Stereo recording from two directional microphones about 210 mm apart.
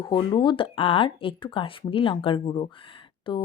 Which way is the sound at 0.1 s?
20° left (ahead or behind).